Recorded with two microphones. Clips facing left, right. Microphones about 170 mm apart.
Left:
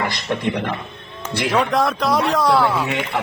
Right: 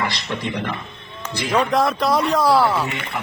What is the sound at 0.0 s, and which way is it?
Speech, 50° left (ahead or behind).